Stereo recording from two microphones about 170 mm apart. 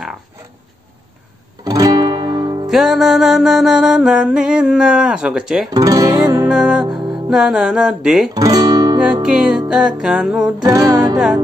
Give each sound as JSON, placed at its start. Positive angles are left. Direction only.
{"t": 1.6, "sound": "music", "side_deg": -20}
{"t": 2.7, "sound": "music", "side_deg": 0}
{"t": 5.7, "sound": "music", "side_deg": -20}
{"t": 6.5, "sound": "music", "side_deg": -5}
{"t": 8.4, "sound": "guitar", "side_deg": -20}
{"t": 9.0, "sound": "music", "side_deg": -5}
{"t": 10.6, "sound": "music", "side_deg": -20}